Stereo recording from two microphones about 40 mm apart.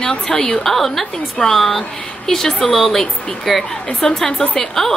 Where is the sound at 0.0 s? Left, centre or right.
Centre.